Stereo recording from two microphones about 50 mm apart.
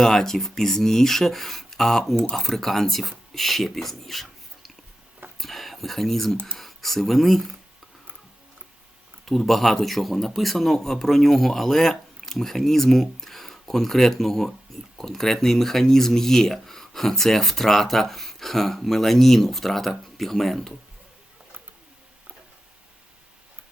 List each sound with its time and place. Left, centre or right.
0.0 s speech: centre
9.2 s speech: centre